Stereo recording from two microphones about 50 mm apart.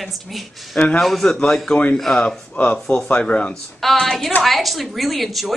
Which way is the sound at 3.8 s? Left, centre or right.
Centre.